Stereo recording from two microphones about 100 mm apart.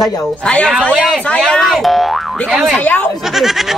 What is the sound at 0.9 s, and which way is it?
Speech, centre (ahead or behind).